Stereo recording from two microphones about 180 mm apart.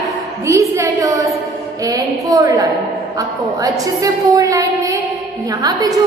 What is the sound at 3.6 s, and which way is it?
A woman's voice, 20° right (ahead or behind).